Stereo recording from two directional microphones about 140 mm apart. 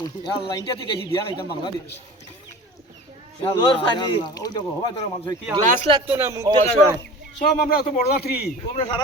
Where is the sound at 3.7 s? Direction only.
40° left (ahead or behind).